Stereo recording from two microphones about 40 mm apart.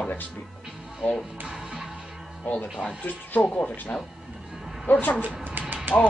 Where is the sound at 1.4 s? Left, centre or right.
Right.